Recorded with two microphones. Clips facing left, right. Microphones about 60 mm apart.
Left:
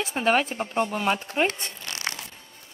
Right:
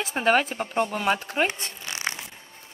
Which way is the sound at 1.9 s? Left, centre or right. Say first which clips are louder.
Right 2 dB; centre.